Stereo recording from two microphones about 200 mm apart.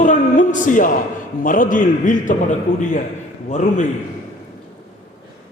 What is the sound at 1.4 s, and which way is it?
A man's voice, 40° left (ahead or behind).